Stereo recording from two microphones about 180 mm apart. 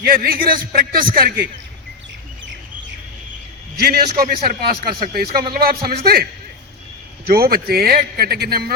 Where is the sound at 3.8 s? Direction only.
55° right (ahead or behind).